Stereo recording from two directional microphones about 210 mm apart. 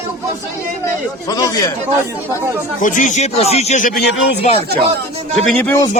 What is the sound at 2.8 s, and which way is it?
Speech, 35° left (ahead or behind).